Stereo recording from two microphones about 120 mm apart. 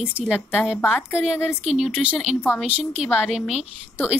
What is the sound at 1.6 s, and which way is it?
A woman's voice, 5° right (ahead or behind).